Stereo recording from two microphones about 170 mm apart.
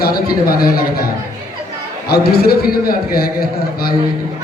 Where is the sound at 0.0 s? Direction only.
60° left (ahead or behind).